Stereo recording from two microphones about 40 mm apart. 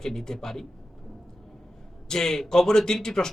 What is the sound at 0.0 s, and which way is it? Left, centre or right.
Speech, centre.